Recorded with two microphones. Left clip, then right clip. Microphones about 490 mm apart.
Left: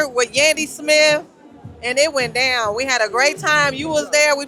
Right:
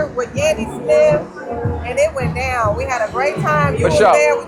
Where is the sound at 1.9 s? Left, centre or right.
Left.